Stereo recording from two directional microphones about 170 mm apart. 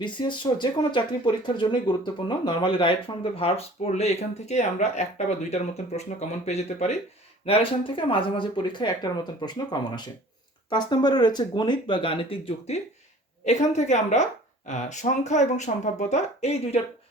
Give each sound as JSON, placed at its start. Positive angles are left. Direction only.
{"t": 0.0, "sound": "speech", "side_deg": 25}